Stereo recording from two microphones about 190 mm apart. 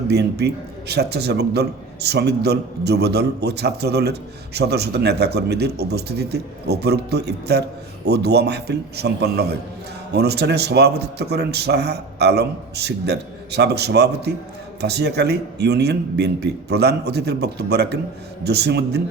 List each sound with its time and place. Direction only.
0.1 s a man's voice: 60° right (ahead or behind)